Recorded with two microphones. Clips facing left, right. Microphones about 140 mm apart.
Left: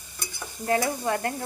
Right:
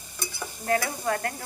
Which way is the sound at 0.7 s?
20° left (ahead or behind).